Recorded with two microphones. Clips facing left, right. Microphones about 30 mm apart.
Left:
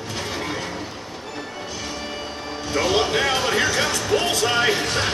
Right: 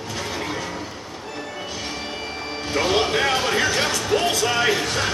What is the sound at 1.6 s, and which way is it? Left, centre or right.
Music, right.